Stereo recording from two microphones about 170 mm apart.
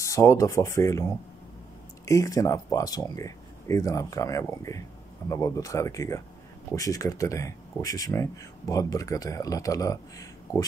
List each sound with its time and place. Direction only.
0.0 s speech: 15° left (ahead or behind)